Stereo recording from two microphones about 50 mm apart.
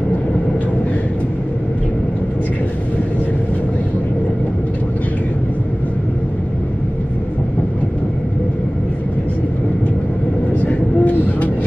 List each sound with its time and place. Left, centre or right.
10.6 s train: left